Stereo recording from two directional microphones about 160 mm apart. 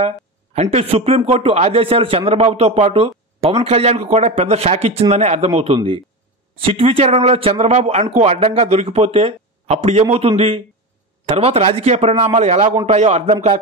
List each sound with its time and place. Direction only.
0.6 s a man's voice: 40° right (ahead or behind)